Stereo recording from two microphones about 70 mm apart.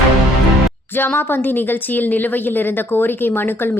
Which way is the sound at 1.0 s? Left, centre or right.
Left.